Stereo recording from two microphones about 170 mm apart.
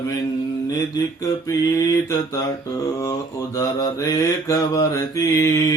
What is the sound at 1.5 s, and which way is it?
Mantra, 20° left (ahead or behind).